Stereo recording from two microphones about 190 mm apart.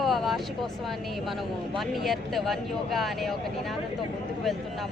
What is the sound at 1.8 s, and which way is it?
Speech, centre (ahead or behind).